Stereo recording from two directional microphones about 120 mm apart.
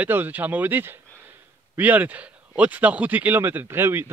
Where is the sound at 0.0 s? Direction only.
15° right (ahead or behind).